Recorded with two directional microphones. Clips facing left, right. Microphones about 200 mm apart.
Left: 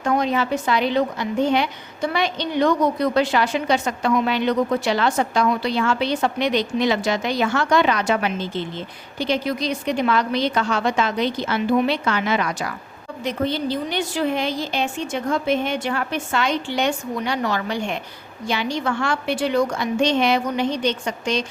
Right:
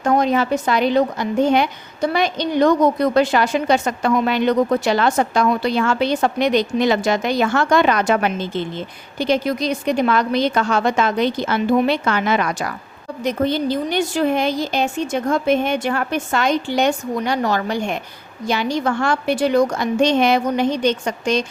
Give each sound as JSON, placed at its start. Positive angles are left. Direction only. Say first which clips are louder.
{"t": 0.0, "sound": "a woman's voice", "louder": "right 4 dB", "side_deg": -45}